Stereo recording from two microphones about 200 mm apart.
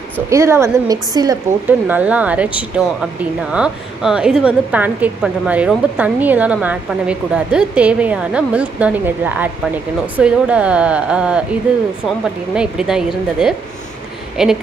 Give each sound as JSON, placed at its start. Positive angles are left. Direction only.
{"t": 0.3, "sound": "a woman's voice", "side_deg": -15}
{"t": 1.7, "sound": "a woman's voice", "side_deg": -10}